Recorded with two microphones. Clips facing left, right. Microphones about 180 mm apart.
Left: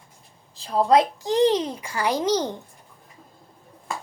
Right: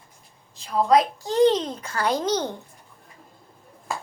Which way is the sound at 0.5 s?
35° left (ahead or behind).